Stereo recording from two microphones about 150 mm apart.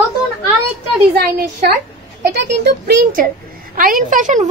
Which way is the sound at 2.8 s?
70° right (ahead or behind).